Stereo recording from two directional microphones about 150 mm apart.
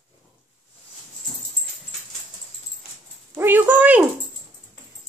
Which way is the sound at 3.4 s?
15° right (ahead or behind).